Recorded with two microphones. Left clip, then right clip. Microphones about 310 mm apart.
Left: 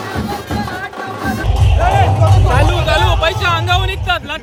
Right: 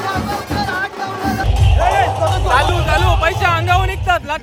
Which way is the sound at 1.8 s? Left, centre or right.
Right.